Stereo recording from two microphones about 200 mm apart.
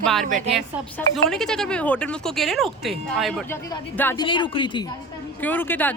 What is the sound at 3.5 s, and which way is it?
Speech, 15° left (ahead or behind).